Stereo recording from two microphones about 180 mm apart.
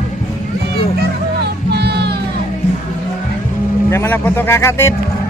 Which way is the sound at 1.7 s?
65° right (ahead or behind).